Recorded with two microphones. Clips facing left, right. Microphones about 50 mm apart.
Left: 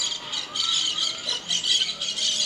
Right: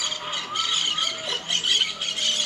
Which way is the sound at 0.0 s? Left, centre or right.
Right.